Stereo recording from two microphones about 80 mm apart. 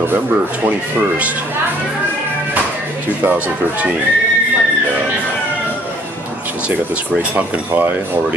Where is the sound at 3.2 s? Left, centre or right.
Centre.